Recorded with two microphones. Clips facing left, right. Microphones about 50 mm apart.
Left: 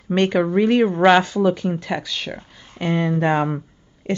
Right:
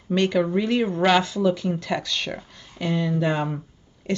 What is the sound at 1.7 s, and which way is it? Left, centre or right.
Speech, centre.